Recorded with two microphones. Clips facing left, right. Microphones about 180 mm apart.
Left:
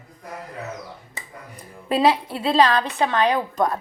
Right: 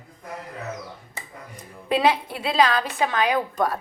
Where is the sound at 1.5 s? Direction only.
30° left (ahead or behind).